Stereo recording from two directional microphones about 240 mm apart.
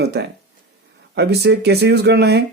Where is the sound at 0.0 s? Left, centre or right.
Right.